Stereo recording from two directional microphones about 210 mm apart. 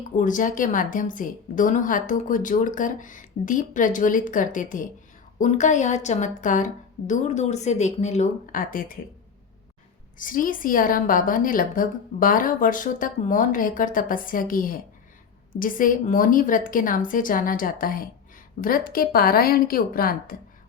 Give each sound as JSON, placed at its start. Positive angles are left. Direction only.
{"t": 0.2, "sound": "a woman's voice", "side_deg": 40}
{"t": 10.2, "sound": "a woman's voice", "side_deg": 40}